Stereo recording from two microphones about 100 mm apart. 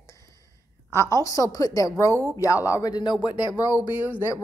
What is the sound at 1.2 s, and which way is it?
A woman's voice, 35° left (ahead or behind).